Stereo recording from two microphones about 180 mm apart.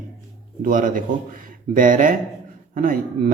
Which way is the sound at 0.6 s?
50° right (ahead or behind).